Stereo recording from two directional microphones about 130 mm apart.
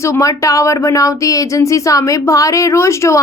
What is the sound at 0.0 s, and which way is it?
A woman's voice, 25° left (ahead or behind).